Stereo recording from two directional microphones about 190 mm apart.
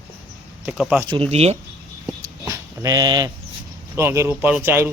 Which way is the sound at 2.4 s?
20° right (ahead or behind).